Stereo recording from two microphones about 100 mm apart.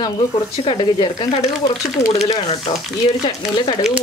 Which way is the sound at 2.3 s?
75° left (ahead or behind).